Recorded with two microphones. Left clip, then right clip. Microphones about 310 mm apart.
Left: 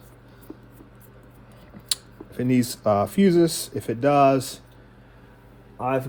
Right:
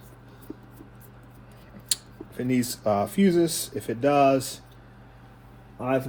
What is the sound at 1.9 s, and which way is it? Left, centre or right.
Speech, left.